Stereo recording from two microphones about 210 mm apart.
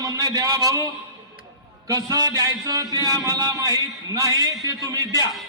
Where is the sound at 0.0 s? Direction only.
15° right (ahead or behind).